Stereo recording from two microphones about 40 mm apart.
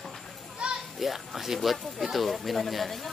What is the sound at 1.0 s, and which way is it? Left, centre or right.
Speech, centre.